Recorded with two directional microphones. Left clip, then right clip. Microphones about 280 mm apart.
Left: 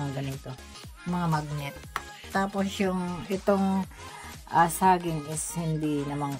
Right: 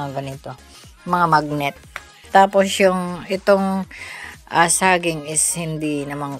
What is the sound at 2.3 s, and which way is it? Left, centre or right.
Speech, right.